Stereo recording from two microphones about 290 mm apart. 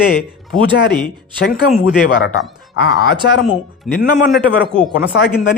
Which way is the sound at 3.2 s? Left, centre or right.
Left.